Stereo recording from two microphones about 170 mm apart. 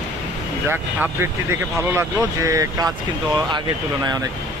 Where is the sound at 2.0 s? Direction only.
20° right (ahead or behind).